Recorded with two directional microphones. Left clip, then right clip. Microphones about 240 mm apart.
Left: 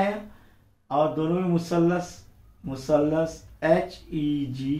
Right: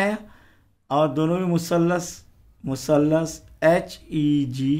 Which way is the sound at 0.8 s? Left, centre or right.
Right.